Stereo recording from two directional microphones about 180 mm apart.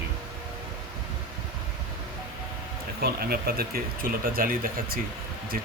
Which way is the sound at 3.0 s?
60° right (ahead or behind).